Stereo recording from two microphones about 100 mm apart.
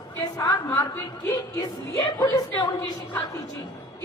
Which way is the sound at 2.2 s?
45° left (ahead or behind).